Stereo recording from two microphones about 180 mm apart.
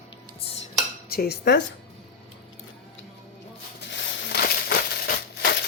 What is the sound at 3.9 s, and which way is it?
Crushing, 65° left (ahead or behind).